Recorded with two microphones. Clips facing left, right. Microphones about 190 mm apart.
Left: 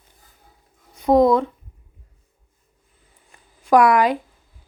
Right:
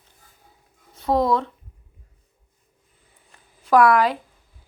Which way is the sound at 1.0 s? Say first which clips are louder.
Left 6 dB; 15° left (ahead or behind).